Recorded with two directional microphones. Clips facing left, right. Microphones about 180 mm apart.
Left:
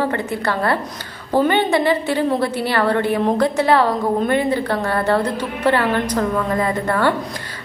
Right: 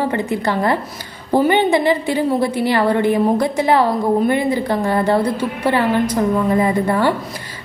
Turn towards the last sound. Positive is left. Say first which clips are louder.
# right 2 dB
turn(degrees=-10)  # may be behind; listen again after turning